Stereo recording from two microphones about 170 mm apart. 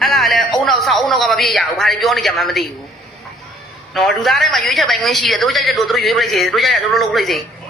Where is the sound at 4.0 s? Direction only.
Centre (ahead or behind).